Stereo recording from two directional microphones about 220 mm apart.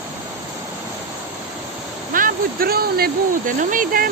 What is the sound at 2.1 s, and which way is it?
Speech, 40° right (ahead or behind).